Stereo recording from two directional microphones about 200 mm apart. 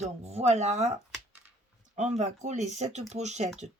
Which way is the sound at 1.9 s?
35° right (ahead or behind).